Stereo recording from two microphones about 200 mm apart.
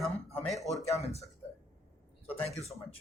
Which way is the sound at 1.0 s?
30° left (ahead or behind).